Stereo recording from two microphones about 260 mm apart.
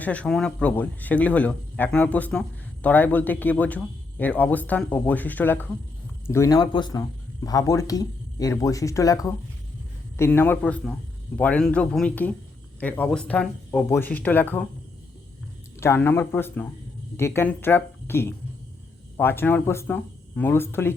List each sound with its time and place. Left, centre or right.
0.0 s speech: centre
15.8 s speech: centre